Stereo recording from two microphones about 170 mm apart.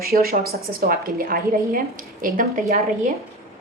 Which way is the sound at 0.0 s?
60° right (ahead or behind).